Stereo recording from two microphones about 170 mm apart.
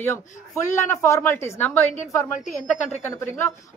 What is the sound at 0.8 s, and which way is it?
A woman's voice, 15° left (ahead or behind).